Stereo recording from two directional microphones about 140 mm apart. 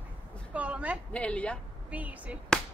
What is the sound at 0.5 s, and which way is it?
Speech, 10° right (ahead or behind).